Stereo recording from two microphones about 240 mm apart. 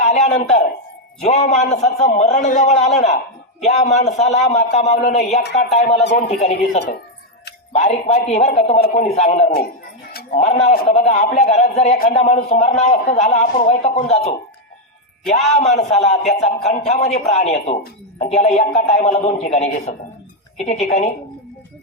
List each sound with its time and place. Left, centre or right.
0.0 s a sound: left
1.2 s a man's voice: left
6.5 s speech: left
7.8 s a man's voice: left
10.1 s a sound: left
10.4 s a man's voice: left
15.5 s a man's voice: left